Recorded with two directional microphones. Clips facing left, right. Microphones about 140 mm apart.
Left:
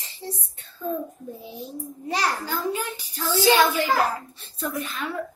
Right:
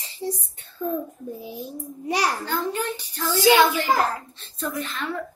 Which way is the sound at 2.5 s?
10° left (ahead or behind).